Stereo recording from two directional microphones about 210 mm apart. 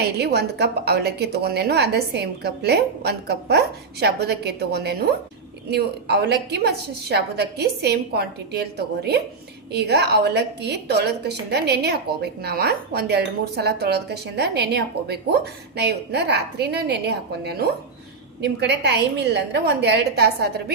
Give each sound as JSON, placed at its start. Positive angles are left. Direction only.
{"t": 0.0, "sound": "a woman's voice", "side_deg": -50}
{"t": 9.7, "sound": "a woman's voice", "side_deg": -50}